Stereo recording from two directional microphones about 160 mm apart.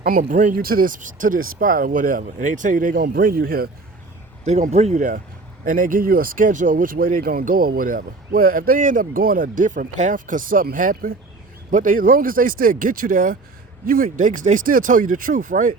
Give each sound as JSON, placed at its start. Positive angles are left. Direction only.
{"t": 0.2, "sound": "speech", "side_deg": -50}
{"t": 4.4, "sound": "speech", "side_deg": -45}